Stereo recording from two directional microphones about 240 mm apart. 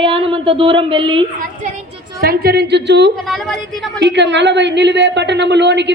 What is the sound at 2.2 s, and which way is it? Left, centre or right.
A woman's voice, right.